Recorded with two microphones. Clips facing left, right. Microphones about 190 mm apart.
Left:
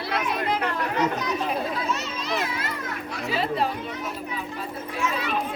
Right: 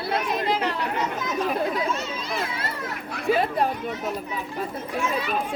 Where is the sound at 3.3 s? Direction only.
50° right (ahead or behind).